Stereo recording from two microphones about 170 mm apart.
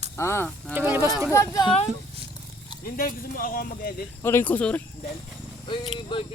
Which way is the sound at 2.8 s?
55° left (ahead or behind).